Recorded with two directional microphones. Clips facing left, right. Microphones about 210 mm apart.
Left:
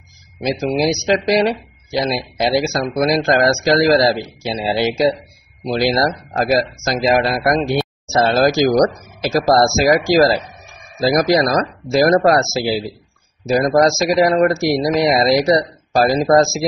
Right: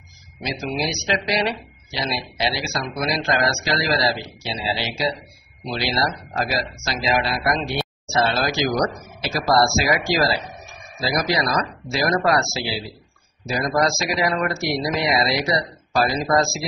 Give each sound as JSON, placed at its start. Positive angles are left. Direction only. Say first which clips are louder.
{"t": 0.4, "sound": "speech", "louder": "left 8 dB", "side_deg": 40}